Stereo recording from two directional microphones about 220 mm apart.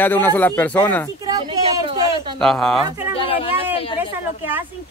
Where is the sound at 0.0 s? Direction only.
10° left (ahead or behind).